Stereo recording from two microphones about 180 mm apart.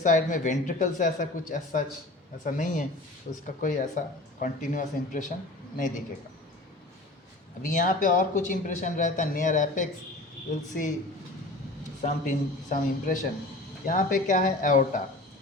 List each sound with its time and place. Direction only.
0.0 s speech: 45° left (ahead or behind)
7.6 s speech: 45° left (ahead or behind)
12.0 s speech: 45° left (ahead or behind)